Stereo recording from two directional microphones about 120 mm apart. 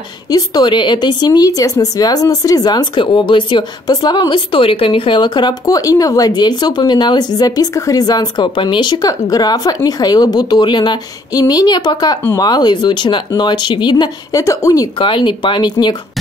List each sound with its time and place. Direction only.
0.3 s speech: 35° left (ahead or behind)
15.0 s speech: 45° left (ahead or behind)